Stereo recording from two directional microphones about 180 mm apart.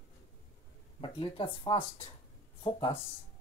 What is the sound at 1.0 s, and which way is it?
Speech, 30° left (ahead or behind).